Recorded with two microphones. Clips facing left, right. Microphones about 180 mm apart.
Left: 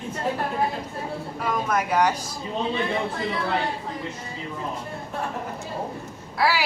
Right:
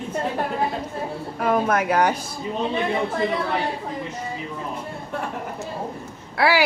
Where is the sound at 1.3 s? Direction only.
55° right (ahead or behind).